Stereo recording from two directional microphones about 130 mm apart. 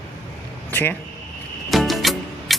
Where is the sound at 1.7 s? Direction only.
Centre (ahead or behind).